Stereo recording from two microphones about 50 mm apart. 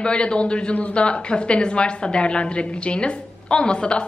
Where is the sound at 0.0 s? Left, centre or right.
Centre.